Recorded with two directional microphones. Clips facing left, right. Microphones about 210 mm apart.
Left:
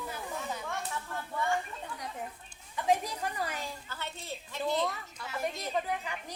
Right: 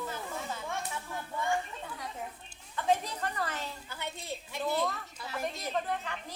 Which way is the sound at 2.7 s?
10° left (ahead or behind).